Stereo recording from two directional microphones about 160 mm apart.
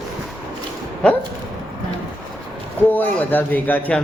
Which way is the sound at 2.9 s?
10° left (ahead or behind).